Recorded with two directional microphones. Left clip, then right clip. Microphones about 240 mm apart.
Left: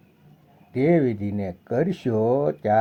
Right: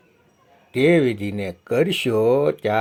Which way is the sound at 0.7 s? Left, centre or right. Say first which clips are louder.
Right 4 dB; right.